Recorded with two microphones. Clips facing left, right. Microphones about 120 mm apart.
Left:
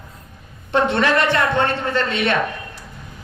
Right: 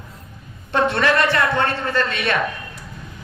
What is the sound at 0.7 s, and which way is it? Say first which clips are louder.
A man's voice: left 1 dB; 20° left (ahead or behind).